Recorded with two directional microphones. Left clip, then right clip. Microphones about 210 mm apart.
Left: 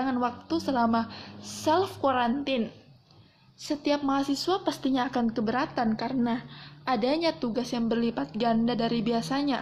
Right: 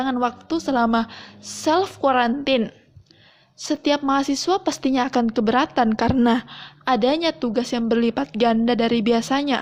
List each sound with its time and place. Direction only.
0.0 s speech: 40° right (ahead or behind)